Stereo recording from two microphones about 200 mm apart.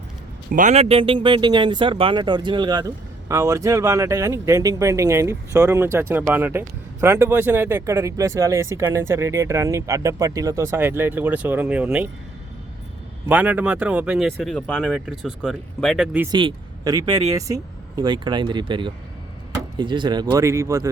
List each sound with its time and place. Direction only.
0.5 s speech: 35° right (ahead or behind); by 12.0 s 5° right (ahead or behind)
13.2 s speech: 5° right (ahead or behind)
16.3 s speech: 25° right (ahead or behind)